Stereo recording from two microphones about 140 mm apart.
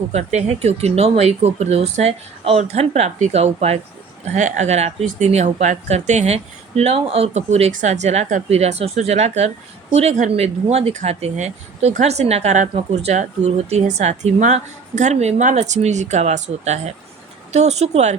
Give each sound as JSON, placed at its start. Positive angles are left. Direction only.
{"t": 0.1, "sound": "speech", "side_deg": -50}